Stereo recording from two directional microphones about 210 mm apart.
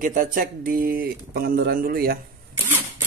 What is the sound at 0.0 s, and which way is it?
Speech, 40° right (ahead or behind).